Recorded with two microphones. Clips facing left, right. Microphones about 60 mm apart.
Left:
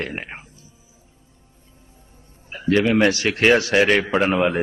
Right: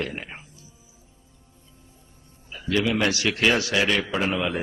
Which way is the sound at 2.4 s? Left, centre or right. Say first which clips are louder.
Left 6 dB; left.